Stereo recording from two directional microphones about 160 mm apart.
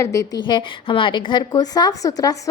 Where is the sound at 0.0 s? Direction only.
20° left (ahead or behind).